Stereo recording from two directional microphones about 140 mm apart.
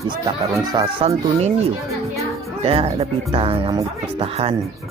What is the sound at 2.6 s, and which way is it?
Speech, 45° right (ahead or behind).